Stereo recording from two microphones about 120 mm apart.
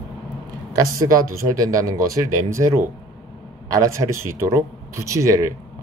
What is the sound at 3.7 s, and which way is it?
Speech, 25° right (ahead or behind).